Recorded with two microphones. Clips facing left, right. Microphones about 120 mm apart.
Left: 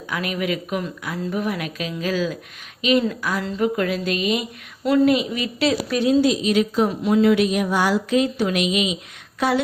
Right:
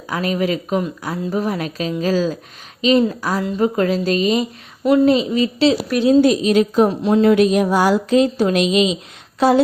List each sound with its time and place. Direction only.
0.1 s a woman's voice: 35° right (ahead or behind)
4.8 s speech: 20° right (ahead or behind)
6.2 s a woman's voice: 45° right (ahead or behind)